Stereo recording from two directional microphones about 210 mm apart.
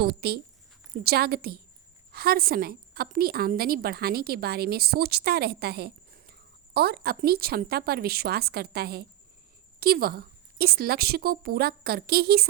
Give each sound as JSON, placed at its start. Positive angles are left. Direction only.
{"t": 0.0, "sound": "a woman's voice", "side_deg": -50}